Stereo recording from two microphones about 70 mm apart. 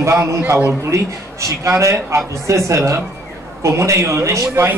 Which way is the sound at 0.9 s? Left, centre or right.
Right.